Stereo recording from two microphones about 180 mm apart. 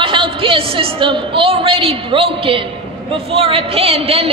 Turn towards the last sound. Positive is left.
turn(degrees=-30)  # may be behind; listen again after turning